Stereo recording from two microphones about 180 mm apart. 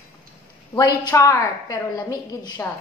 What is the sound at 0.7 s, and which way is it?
A woman's voice, 20° left (ahead or behind).